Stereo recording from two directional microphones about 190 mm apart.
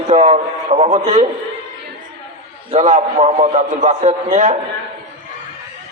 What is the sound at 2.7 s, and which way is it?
A man's voice, 40° right (ahead or behind).